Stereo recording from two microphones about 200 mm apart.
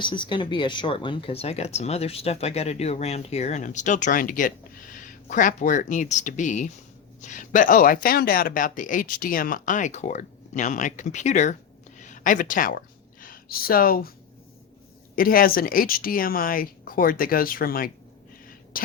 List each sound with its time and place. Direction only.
0.0 s speech: 25° left (ahead or behind); by 14.1 s 45° left (ahead or behind)
15.1 s speech: 45° left (ahead or behind)